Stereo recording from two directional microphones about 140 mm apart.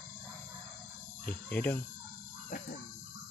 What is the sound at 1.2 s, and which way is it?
Cricket, 10° left (ahead or behind).